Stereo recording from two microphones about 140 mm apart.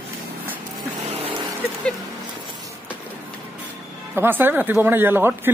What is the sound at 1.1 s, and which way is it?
Vehicle, 45° right (ahead or behind).